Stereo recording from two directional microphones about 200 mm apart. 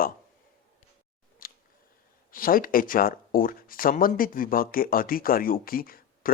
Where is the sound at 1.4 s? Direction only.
45° left (ahead or behind).